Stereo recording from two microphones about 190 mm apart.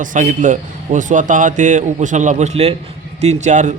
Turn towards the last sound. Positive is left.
turn(degrees=-40)  # may be behind; listen again after turning